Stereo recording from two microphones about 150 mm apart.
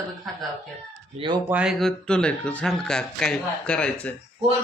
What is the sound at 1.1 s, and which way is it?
Speech, 35° right (ahead or behind).